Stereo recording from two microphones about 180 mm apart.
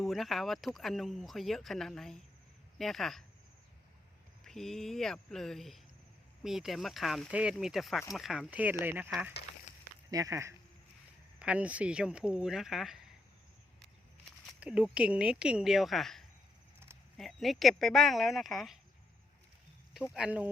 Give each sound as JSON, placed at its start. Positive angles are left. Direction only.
{"t": 0.0, "sound": "speech", "side_deg": 0}
{"t": 4.4, "sound": "speech", "side_deg": 0}
{"t": 9.7, "sound": "a sound", "side_deg": 45}
{"t": 10.1, "sound": "speech", "side_deg": -20}
{"t": 11.3, "sound": "speech", "side_deg": -5}
{"t": 14.6, "sound": "speech", "side_deg": -5}
{"t": 20.1, "sound": "speech", "side_deg": -5}